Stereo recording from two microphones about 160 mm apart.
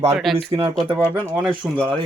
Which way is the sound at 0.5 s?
30° right (ahead or behind).